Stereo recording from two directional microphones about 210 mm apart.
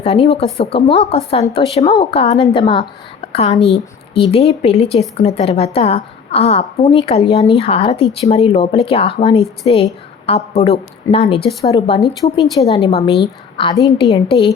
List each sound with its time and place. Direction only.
0.0 s a woman's voice: 30° left (ahead or behind)